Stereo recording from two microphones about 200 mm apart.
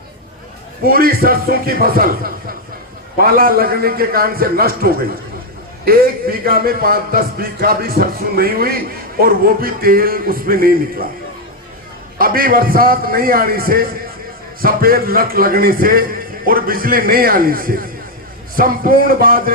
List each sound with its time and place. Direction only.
0.9 s a man's voice: 45° right (ahead or behind)
12.2 s a man's voice: 45° right (ahead or behind)